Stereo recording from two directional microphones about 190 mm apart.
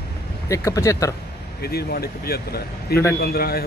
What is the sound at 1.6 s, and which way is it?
Speech, 55° left (ahead or behind).